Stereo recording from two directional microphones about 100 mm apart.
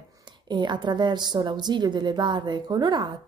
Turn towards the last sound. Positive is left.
turn(degrees=-45)  # may be behind; listen again after turning